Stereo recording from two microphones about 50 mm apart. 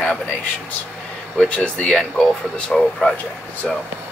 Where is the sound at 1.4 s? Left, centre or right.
Centre.